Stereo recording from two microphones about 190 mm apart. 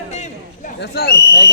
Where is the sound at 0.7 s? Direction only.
60° left (ahead or behind).